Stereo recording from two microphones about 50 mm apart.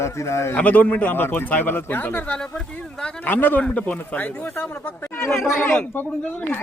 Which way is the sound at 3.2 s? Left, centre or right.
Left.